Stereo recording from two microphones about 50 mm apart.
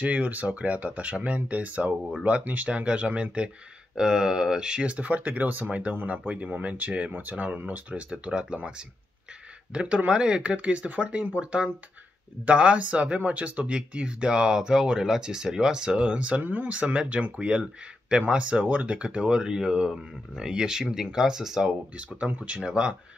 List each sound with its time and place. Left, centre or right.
0.0 s speech: right
3.9 s speech: centre; by 8.2 s right
8.3 s speech: centre
9.8 s speech: right
16.4 s speech: right
16.8 s speech: right
21.9 s speech: right